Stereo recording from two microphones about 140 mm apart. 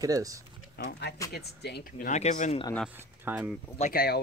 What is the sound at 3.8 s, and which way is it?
Speech, 90° left.